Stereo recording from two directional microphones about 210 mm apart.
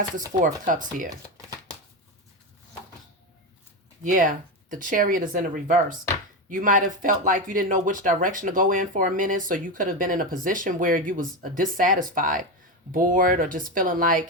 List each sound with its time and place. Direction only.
4.0 s speech: 40° right (ahead or behind)